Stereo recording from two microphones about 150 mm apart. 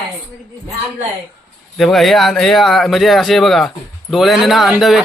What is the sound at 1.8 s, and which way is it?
Speech, centre (ahead or behind).